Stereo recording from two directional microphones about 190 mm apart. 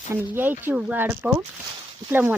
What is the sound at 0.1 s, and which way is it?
Speech, 10° right (ahead or behind).